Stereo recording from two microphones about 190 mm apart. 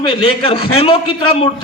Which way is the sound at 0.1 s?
25° left (ahead or behind).